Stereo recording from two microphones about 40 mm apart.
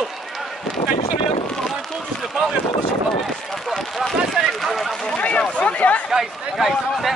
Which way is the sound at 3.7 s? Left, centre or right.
Centre.